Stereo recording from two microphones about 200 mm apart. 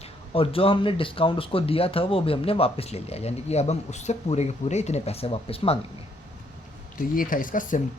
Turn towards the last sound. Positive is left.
turn(degrees=40)  # may be behind; listen again after turning